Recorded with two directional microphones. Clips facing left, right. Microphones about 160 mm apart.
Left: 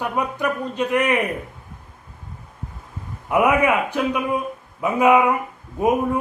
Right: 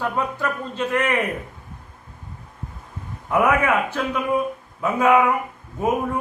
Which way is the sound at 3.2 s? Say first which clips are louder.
Left 2 dB; 15° left (ahead or behind).